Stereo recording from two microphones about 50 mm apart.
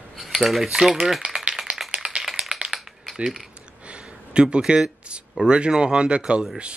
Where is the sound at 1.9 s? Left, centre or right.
Centre.